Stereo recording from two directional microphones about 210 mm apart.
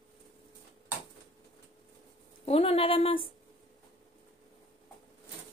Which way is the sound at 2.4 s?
30° left (ahead or behind).